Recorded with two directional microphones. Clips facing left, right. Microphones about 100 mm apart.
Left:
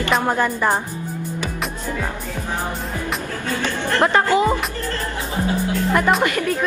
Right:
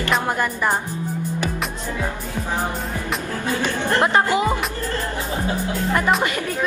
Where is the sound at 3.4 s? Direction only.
20° right (ahead or behind).